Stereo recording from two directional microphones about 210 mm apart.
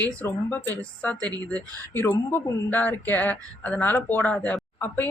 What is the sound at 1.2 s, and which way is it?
Speech, 20° right (ahead or behind).